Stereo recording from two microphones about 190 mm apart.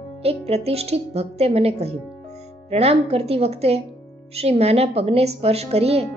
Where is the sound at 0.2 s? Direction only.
35° right (ahead or behind).